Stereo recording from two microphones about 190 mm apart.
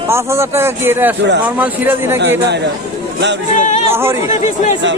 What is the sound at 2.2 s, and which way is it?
Speech, 60° right (ahead or behind).